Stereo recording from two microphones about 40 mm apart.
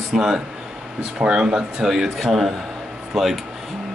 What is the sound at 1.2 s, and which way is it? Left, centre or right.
Speech, right.